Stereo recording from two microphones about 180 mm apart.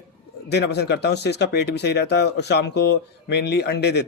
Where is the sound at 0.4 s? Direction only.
70° left (ahead or behind).